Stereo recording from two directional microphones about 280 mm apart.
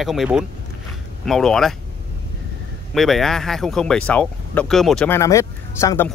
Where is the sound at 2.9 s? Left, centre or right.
Centre.